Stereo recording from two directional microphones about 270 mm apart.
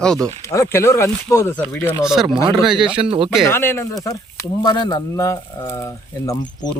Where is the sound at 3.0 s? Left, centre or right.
Centre.